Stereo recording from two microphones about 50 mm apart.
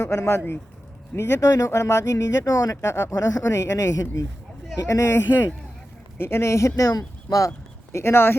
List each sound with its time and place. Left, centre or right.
0.0 s speech: left
0.3 s speech: left
7.9 s speech: left